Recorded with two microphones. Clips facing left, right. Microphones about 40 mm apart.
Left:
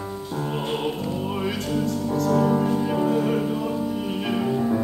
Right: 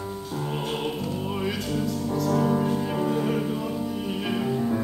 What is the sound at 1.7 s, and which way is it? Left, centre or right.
Music, centre.